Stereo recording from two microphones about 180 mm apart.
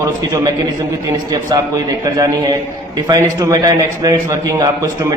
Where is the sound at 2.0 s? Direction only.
20° right (ahead or behind).